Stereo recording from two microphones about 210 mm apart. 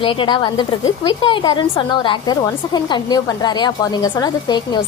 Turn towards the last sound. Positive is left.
turn(degrees=20)  # may be behind; listen again after turning